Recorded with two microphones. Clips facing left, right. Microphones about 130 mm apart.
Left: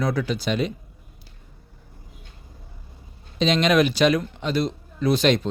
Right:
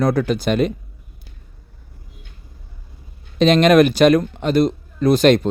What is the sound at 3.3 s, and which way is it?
A man's voice, 55° right (ahead or behind).